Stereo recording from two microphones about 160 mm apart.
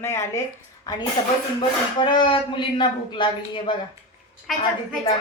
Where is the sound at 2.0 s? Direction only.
30° left (ahead or behind).